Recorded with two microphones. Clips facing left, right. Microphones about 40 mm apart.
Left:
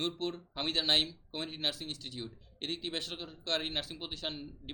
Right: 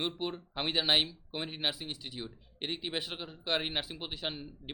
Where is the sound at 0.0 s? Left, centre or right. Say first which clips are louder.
Even; centre.